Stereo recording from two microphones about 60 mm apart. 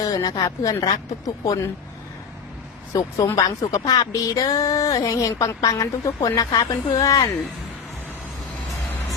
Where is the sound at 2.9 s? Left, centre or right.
Left.